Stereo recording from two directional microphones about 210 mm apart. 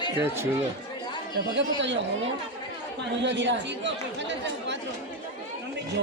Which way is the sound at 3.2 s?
55° right (ahead or behind).